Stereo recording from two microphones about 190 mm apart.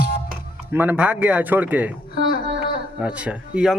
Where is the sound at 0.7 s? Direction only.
10° right (ahead or behind).